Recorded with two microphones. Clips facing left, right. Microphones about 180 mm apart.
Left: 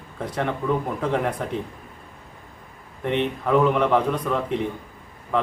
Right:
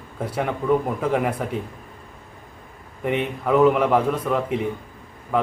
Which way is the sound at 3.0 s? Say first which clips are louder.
Even; 5° right (ahead or behind).